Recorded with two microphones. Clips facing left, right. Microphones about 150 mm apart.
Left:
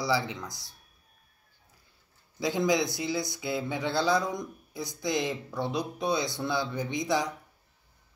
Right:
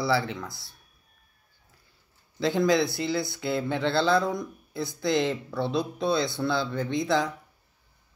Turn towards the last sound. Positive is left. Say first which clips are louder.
# right 3 dB
turn(degrees=15)  # may be behind; listen again after turning